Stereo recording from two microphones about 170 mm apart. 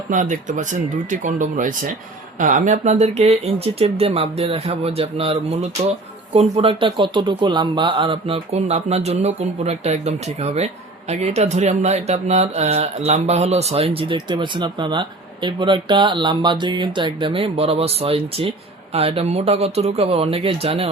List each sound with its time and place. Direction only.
0.1 s speech: 50° right (ahead or behind)